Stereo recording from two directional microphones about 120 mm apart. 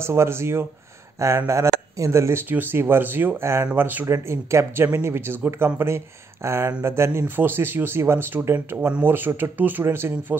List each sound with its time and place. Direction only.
0.0 s speech: 20° right (ahead or behind)